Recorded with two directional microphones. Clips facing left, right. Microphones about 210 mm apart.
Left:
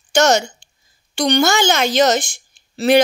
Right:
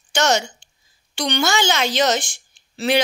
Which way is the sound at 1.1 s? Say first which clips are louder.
Left 5 dB; 45° left (ahead or behind).